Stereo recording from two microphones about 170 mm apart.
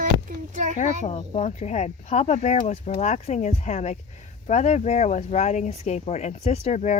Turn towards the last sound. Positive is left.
turn(degrees=45)  # may be behind; listen again after turning